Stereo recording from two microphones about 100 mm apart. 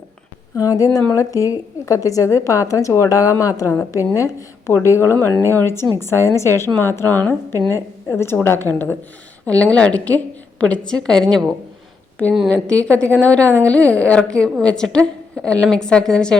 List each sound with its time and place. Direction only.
0.5 s a woman's voice: 35° left (ahead or behind)
9.5 s a woman's voice: 10° left (ahead or behind)